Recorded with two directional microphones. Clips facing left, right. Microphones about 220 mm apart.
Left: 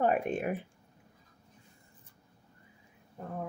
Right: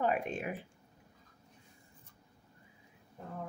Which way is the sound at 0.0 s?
50° left (ahead or behind).